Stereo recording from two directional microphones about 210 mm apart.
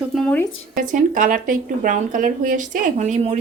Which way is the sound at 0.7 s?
40° right (ahead or behind).